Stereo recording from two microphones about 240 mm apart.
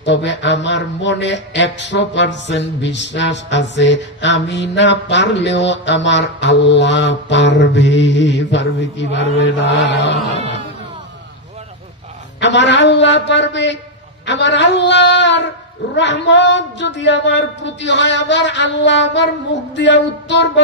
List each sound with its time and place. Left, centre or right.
0.0 s speech: left
12.4 s speech: left